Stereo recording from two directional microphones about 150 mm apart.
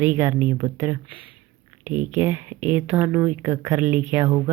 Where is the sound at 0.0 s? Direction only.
15° right (ahead or behind).